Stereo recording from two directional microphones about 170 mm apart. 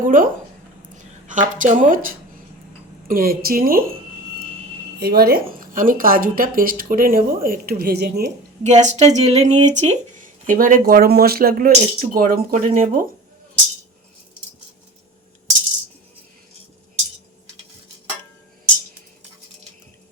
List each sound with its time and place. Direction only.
0.0 s speech: 55° right (ahead or behind)
4.9 s speech: 65° right (ahead or behind)
8.6 s speech: 40° right (ahead or behind)